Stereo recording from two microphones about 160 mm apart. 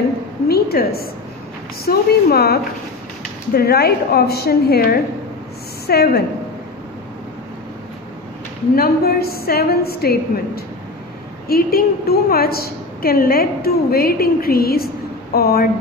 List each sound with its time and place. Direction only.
0.5 s a sound: 75° left (ahead or behind)
1.9 s a woman's voice: 75° left (ahead or behind)
5.9 s a woman's voice: 85° left
8.7 s a woman's voice: 75° left (ahead or behind)